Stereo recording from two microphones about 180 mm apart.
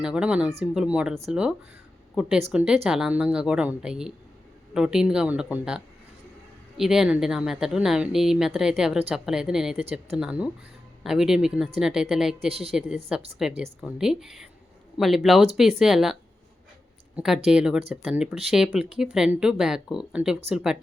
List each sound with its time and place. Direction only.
0.0 s speech: 5° right (ahead or behind)
12.5 s a woman's voice: 35° right (ahead or behind)
13.1 s speech: 5° right (ahead or behind)
17.2 s speech: 5° right (ahead or behind)